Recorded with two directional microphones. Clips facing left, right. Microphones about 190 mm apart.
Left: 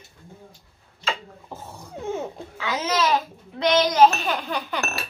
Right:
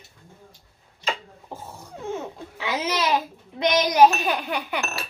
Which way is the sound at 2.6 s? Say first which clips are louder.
Left 2 dB; 15° right (ahead or behind).